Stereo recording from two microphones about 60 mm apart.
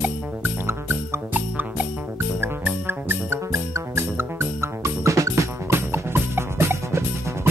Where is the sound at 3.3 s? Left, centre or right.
Right.